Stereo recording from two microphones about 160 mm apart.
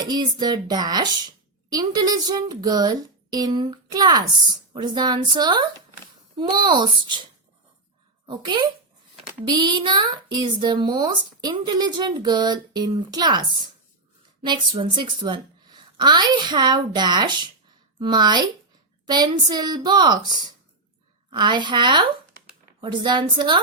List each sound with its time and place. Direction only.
0.0 s speech: 25° right (ahead or behind)
8.3 s speech: 30° right (ahead or behind)